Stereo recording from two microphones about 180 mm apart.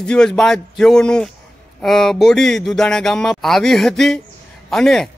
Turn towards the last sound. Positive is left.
turn(degrees=0)  # may be behind; listen again after turning